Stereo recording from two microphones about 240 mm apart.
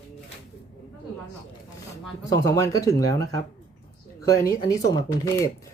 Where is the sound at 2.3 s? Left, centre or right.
Centre.